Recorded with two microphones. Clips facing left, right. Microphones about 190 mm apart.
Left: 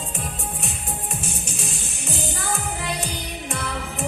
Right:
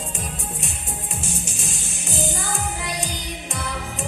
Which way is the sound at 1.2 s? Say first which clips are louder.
Even; 60° left (ahead or behind).